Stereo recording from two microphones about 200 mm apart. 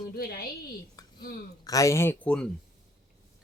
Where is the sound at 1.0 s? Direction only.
20° left (ahead or behind).